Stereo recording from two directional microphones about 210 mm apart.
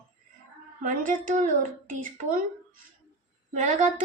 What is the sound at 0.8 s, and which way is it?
A woman's voice, 40° right (ahead or behind).